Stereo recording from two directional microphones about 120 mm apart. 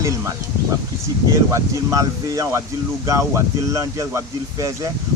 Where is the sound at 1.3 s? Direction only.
25° right (ahead or behind).